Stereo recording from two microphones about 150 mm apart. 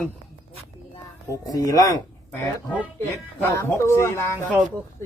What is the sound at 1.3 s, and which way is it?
Speech, 20° left (ahead or behind).